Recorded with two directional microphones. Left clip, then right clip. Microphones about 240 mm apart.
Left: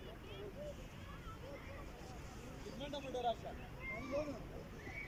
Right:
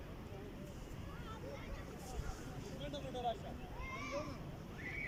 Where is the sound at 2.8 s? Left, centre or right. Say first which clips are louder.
Left 2 dB; centre.